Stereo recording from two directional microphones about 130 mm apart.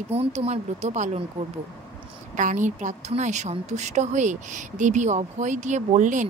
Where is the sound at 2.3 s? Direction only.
75° right (ahead or behind).